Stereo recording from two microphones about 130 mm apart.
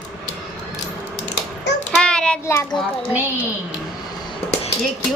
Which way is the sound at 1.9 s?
5° left (ahead or behind).